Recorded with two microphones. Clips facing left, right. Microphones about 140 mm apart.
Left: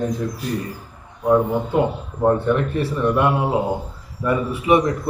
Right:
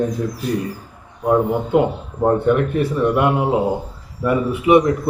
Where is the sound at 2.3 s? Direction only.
15° right (ahead or behind).